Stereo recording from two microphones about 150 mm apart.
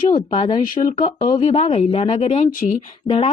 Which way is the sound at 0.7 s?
65° left (ahead or behind).